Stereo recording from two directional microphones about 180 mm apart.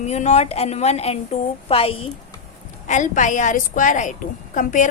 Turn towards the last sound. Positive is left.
turn(degrees=45)  # may be behind; listen again after turning